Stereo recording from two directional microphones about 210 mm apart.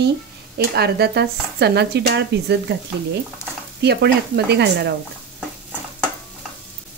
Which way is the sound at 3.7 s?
50° right (ahead or behind).